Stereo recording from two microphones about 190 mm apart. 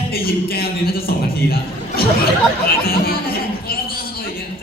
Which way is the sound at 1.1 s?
55° left (ahead or behind).